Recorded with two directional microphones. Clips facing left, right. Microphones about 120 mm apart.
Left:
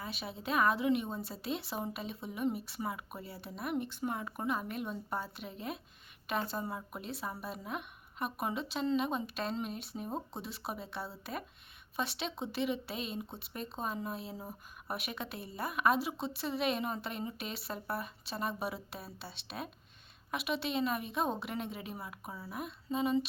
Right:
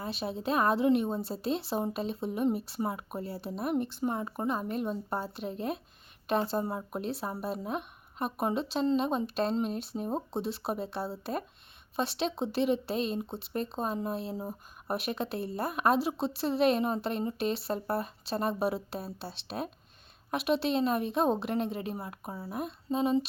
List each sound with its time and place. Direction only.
0.0 s a woman's voice: 30° right (ahead or behind)